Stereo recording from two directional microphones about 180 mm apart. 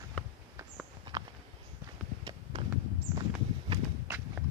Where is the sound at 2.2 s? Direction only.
25° right (ahead or behind).